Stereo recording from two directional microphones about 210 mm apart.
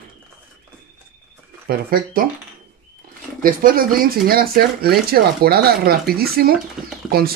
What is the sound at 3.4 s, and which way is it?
Speech, 45° right (ahead or behind).